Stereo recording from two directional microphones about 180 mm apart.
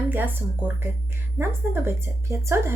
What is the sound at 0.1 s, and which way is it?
A woman's voice, 10° right (ahead or behind).